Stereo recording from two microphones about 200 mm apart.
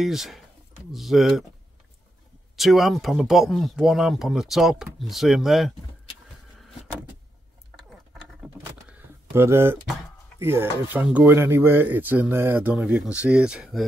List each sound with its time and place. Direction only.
0.0 s speech: centre (ahead or behind)
2.5 s speech: centre (ahead or behind)
8.4 s a sound: 5° right (ahead or behind)
9.3 s speech: 10° right (ahead or behind)